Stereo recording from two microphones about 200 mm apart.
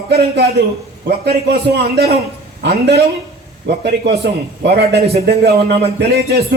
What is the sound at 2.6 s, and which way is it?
A man's voice, 55° right (ahead or behind).